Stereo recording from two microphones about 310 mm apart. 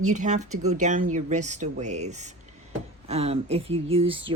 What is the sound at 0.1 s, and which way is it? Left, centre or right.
Speech, right.